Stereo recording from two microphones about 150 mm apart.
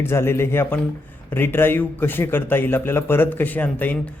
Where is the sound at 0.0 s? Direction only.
15° left (ahead or behind).